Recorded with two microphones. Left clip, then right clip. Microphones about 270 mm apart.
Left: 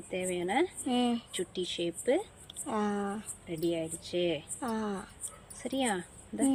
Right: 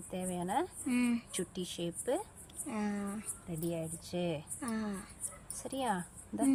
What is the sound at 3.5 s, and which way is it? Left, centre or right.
Speech, right.